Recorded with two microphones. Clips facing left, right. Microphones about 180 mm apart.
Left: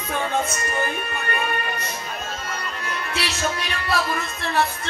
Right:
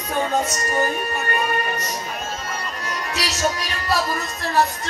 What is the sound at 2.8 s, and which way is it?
Music, 40° right (ahead or behind).